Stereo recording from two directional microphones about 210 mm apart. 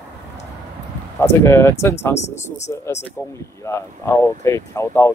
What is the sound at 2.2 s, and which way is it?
Speech, 30° left (ahead or behind).